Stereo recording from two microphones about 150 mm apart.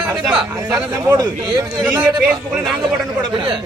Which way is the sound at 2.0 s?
Centre (ahead or behind).